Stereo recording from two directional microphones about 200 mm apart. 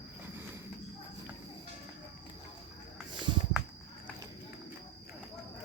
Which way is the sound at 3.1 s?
25° right (ahead or behind).